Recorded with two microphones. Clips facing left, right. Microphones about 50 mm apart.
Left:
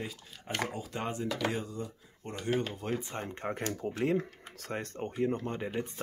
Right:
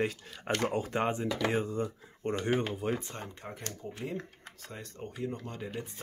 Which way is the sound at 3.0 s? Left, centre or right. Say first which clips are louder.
Left 3 dB; left.